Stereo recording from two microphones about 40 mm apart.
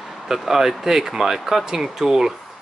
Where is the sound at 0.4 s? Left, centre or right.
Centre.